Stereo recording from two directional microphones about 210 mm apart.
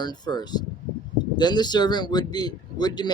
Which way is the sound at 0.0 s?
20° left (ahead or behind).